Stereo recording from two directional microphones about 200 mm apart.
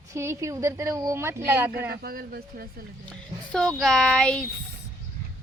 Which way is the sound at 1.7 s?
50° right (ahead or behind).